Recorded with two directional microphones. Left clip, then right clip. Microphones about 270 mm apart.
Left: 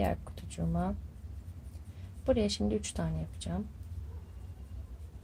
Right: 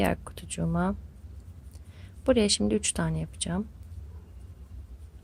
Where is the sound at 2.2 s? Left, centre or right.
Right.